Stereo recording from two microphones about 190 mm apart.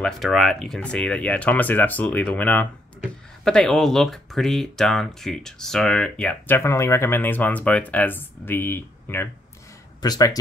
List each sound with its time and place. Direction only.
0.0 s speech: centre (ahead or behind); by 10.4 s 20° left (ahead or behind)